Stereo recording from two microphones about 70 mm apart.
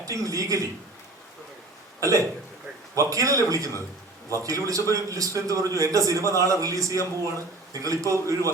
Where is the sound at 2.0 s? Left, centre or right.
Right.